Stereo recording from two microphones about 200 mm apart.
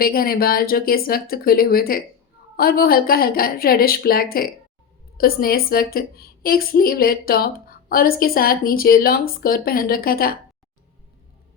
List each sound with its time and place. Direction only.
0.0 s a woman's voice: 45° left (ahead or behind)